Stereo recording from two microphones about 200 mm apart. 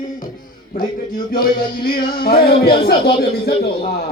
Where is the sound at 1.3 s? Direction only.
50° left (ahead or behind).